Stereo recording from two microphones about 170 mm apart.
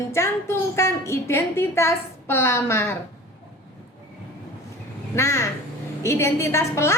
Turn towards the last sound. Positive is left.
turn(degrees=15)  # may be behind; listen again after turning